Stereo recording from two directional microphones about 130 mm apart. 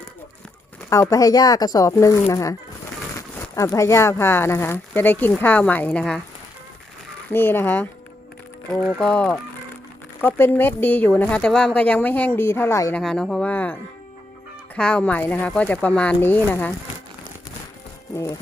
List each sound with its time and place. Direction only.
0.9 s speech: 25° left (ahead or behind); by 6.2 s 5° left (ahead or behind)
7.3 s speech: 15° left (ahead or behind)
8.7 s speech: 5° left (ahead or behind)
10.2 s speech: 15° left (ahead or behind)
13.0 s speech: 5° left (ahead or behind)
14.8 s speech: 10° left (ahead or behind)
18.1 s speech: 20° left (ahead or behind)